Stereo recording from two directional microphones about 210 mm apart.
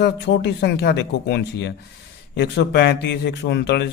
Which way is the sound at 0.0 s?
55° left (ahead or behind).